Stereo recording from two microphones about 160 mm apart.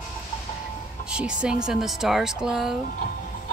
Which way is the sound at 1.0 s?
5° right (ahead or behind).